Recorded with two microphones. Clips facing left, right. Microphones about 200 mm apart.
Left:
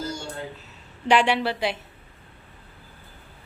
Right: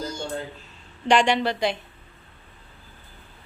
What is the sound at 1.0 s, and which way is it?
Speech, 5° left (ahead or behind).